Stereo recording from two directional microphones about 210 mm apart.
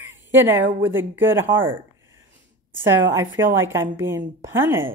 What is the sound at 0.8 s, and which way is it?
A woman's voice, 10° right (ahead or behind).